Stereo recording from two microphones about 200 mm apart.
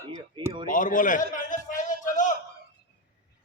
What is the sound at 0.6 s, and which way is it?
A man's voice, 40° left (ahead or behind).